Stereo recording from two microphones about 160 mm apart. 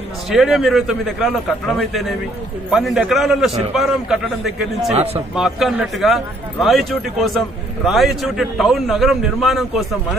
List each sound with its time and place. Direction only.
0.3 s a man's voice: centre (ahead or behind)
4.9 s a man's voice: 40° right (ahead or behind)
5.3 s a man's voice: centre (ahead or behind)